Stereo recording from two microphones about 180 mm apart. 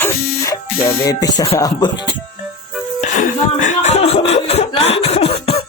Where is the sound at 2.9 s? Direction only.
40° left (ahead or behind).